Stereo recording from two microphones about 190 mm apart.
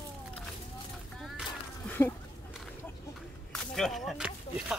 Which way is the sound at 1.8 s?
10° left (ahead or behind).